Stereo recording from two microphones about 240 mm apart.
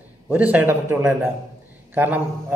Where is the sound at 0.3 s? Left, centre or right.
Centre.